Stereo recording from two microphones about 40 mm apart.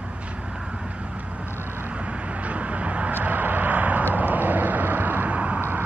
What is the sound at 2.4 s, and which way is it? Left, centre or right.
Vehicle, right.